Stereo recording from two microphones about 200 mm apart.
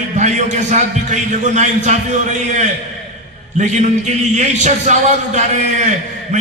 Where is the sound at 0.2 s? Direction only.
35° right (ahead or behind).